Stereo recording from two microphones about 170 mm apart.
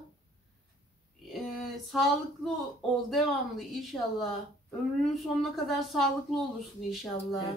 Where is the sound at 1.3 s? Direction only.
Centre (ahead or behind).